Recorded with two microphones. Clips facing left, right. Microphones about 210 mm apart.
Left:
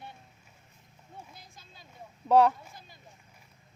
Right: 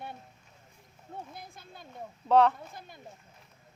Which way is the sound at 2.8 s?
55° right (ahead or behind).